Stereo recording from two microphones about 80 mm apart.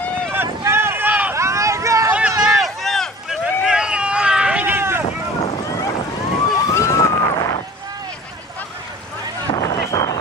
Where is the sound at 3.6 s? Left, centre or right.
Centre; by 5.0 s right.